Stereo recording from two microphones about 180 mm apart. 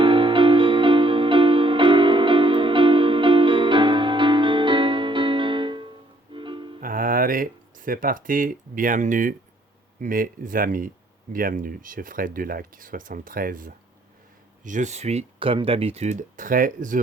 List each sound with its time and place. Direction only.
0.0 s music: 30° right (ahead or behind)
6.7 s a sound: 50° right (ahead or behind)
10.0 s speech: 50° right (ahead or behind)